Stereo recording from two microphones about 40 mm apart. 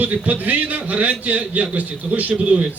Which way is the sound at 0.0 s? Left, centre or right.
Right.